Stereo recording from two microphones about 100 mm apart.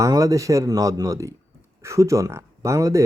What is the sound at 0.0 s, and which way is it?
Speech, 35° right (ahead or behind).